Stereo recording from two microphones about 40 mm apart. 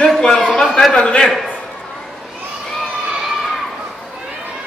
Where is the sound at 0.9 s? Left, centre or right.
Left.